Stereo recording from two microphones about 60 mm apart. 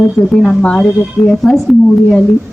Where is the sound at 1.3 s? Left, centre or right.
Centre.